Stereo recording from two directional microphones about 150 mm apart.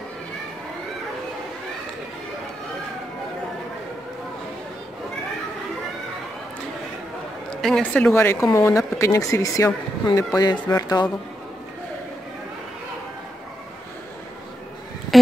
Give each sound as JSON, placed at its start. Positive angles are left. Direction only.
{"t": 7.6, "sound": "speech", "side_deg": 5}